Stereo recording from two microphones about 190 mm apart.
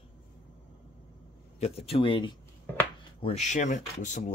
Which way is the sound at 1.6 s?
30° left (ahead or behind).